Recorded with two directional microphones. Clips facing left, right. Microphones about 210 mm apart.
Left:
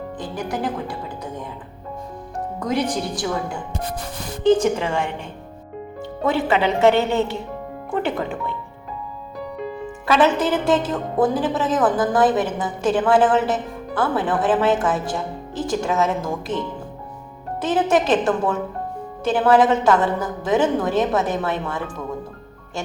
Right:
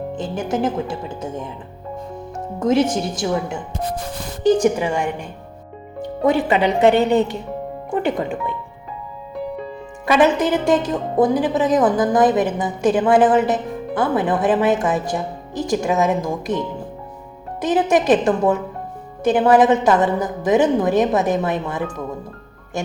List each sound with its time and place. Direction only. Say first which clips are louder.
0.2 s speech: right 4 dB; 25° right (ahead or behind)
2.6 s speech: right 6 dB; 25° right (ahead or behind)
6.2 s speech: right 3 dB; 15° right (ahead or behind)
10.1 s speech: right 2 dB; 15° right (ahead or behind)
17.6 s speech: right 2 dB; 15° right (ahead or behind)